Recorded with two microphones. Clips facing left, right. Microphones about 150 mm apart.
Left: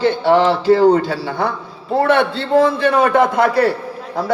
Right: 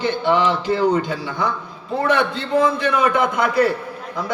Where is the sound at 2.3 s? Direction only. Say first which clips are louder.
Left 4 dB; 30° left (ahead or behind).